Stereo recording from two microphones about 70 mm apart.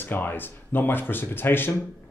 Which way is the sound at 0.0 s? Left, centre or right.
Left.